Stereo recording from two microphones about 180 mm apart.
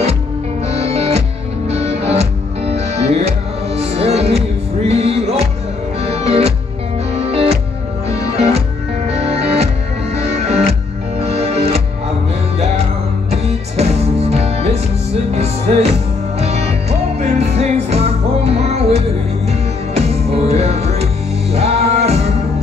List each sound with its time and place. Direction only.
0.7 s music: 35° right (ahead or behind)
8.1 s music: 20° left (ahead or behind)
8.4 s music: 35° right (ahead or behind)
13.3 s music: 35° right (ahead or behind)